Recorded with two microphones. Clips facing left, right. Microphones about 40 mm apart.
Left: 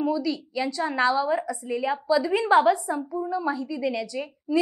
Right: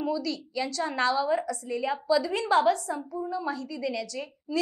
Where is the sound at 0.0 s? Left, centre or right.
Centre.